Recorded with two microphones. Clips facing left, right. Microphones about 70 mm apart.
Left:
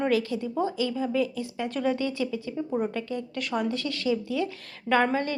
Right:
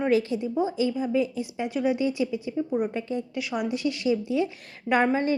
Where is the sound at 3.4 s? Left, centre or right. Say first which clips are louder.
Even; centre.